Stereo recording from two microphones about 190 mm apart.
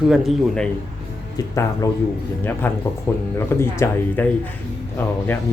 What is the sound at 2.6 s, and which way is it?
Speech, 10° left (ahead or behind).